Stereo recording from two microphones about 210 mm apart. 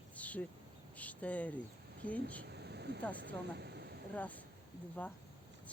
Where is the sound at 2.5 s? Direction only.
50° right (ahead or behind).